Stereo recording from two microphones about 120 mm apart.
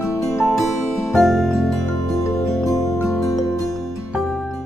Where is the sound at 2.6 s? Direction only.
30° left (ahead or behind).